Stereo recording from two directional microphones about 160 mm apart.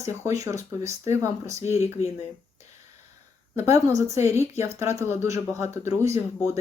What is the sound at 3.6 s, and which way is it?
Speech, 20° right (ahead or behind).